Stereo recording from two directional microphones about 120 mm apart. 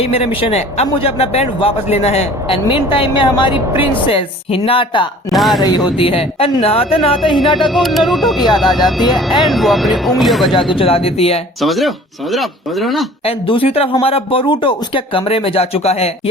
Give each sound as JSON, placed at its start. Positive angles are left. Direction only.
{"t": 0.0, "sound": "speech", "side_deg": 55}
{"t": 2.6, "sound": "a woman's voice", "side_deg": 45}
{"t": 5.3, "sound": "speech", "side_deg": 0}
{"t": 5.6, "sound": "speech", "side_deg": 35}
{"t": 6.0, "sound": "a woman's voice", "side_deg": 50}
{"t": 7.7, "sound": "speech", "side_deg": 0}
{"t": 8.8, "sound": "speech", "side_deg": 35}
{"t": 9.4, "sound": "speech", "side_deg": 0}
{"t": 10.7, "sound": "a woman's voice", "side_deg": 50}
{"t": 11.6, "sound": "speech", "side_deg": 0}
{"t": 13.2, "sound": "a woman's voice", "side_deg": 50}